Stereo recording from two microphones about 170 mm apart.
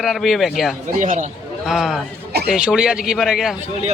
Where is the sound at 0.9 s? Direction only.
50° right (ahead or behind).